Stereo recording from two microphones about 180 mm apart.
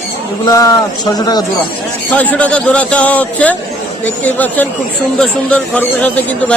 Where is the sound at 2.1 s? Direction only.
10° left (ahead or behind).